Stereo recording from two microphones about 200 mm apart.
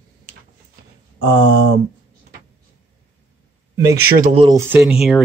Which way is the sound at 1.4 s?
55° right (ahead or behind).